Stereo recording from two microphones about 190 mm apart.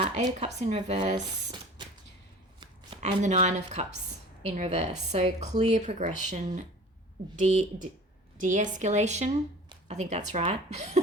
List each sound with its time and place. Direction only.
0.0 s a sound: 35° right (ahead or behind)
0.3 s speech: 35° right (ahead or behind)
3.0 s speech: 40° right (ahead or behind)
8.4 s speech: 40° right (ahead or behind)